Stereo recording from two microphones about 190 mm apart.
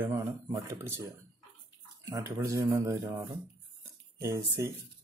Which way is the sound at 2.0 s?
20° right (ahead or behind).